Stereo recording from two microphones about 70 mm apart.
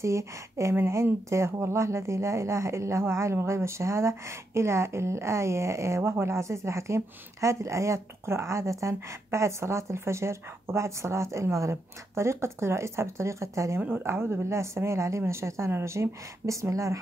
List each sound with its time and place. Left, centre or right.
0.0 s speech: right
0.7 s speech: right
13.7 s a woman's voice: right